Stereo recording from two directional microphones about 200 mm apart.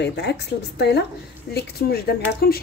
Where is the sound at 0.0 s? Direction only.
55° left (ahead or behind).